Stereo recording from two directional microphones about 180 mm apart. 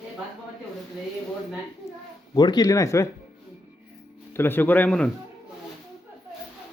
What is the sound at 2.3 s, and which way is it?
Speech, 25° left (ahead or behind).